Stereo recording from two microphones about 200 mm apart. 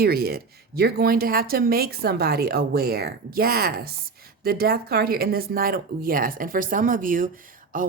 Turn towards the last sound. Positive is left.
turn(degrees=-45)  # may be behind; listen again after turning